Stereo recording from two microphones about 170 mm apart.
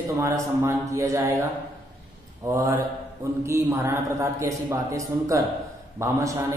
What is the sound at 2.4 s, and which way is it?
A man's voice, 20° right (ahead or behind).